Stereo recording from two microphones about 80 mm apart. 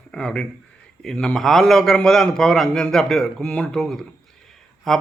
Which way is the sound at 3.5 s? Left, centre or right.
Centre.